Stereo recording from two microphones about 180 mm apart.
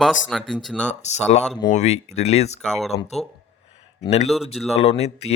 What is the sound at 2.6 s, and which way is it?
Speech, 5° left (ahead or behind).